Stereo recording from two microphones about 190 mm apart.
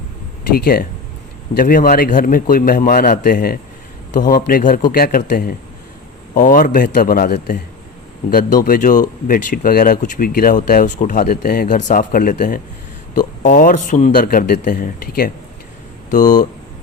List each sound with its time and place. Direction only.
0.5 s speech: 55° left (ahead or behind)